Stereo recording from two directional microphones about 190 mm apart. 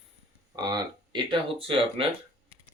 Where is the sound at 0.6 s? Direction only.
20° right (ahead or behind).